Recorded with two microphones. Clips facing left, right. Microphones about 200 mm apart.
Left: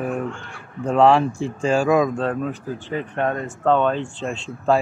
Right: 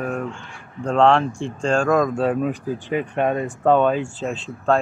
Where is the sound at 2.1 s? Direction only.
10° right (ahead or behind).